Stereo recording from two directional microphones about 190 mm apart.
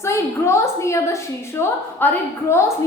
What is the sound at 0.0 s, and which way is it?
A woman's voice, 15° left (ahead or behind).